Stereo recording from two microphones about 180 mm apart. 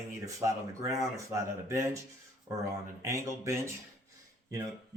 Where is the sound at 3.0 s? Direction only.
15° right (ahead or behind).